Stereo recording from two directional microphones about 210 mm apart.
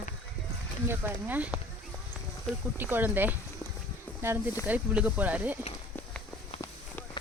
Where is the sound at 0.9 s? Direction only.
10° right (ahead or behind).